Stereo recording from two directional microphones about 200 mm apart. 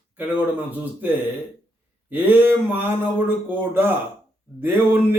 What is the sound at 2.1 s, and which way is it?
A man's voice, 10° right (ahead or behind).